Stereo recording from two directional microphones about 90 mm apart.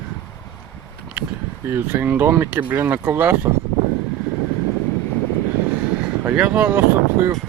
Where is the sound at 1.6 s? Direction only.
25° right (ahead or behind).